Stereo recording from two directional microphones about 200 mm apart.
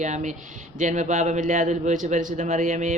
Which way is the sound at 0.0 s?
35° right (ahead or behind).